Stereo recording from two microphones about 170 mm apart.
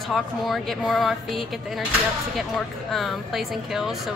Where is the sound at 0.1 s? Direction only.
Centre (ahead or behind).